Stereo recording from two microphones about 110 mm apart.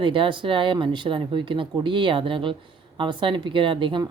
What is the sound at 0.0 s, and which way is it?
Speech, 50° right (ahead or behind).